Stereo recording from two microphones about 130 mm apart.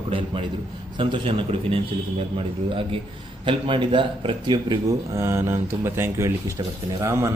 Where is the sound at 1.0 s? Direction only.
40° right (ahead or behind).